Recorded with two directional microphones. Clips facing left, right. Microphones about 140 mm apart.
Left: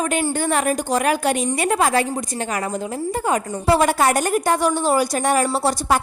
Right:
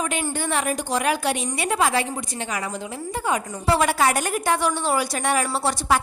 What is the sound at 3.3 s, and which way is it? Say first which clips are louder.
A woman's voice: left 3 dB; 45° left (ahead or behind).